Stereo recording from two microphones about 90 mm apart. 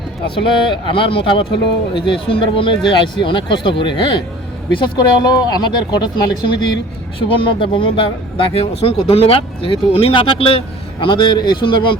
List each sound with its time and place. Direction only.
0.3 s speech: 65° left (ahead or behind)
4.8 s speech: 50° left (ahead or behind)
7.3 s speech: 75° left (ahead or behind)
11.0 s a man's voice: 60° left (ahead or behind)